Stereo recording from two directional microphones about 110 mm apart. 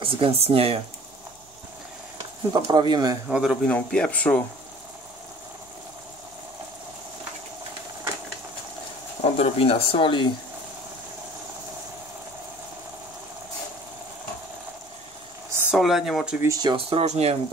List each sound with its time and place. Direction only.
0.0 s speech: 60° right (ahead or behind)
2.5 s speech: 40° right (ahead or behind)
3.3 s speech: 5° right (ahead or behind)
3.6 s speech: 10° left (ahead or behind)
9.2 s speech: 65° left (ahead or behind)
15.7 s speech: 5° right (ahead or behind)
16.4 s speech: 35° right (ahead or behind)
16.7 s speech: 70° right (ahead or behind)